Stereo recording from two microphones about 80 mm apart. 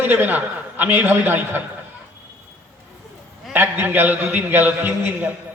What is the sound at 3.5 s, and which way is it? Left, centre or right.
A man's voice, right.